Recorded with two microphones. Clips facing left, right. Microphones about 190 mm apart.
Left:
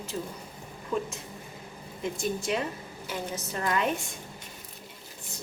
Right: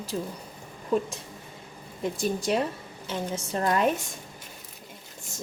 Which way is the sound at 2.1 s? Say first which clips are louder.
Right 4 dB; 35° right (ahead or behind).